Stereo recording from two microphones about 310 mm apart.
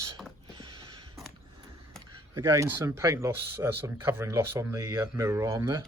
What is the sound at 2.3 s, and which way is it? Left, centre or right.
Speech, centre.